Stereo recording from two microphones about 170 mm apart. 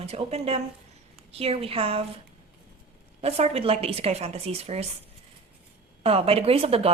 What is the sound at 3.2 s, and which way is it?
A woman's voice, 35° right (ahead or behind).